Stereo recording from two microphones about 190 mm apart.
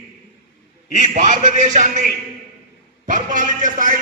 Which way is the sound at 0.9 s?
40° right (ahead or behind).